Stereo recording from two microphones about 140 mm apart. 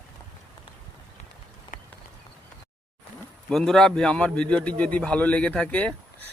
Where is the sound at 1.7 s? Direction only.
80° left.